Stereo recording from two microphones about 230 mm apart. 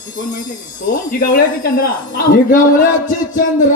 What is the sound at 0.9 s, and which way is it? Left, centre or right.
Dog, left.